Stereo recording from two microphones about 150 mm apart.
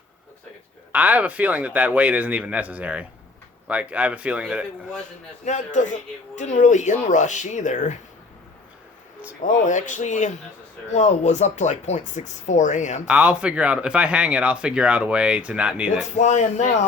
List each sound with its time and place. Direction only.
0.9 s speech: 10° right (ahead or behind)
5.5 s speech: 55° left (ahead or behind)
9.4 s speech: 55° left (ahead or behind)
13.1 s speech: 10° right (ahead or behind)
16.1 s speech: 50° left (ahead or behind)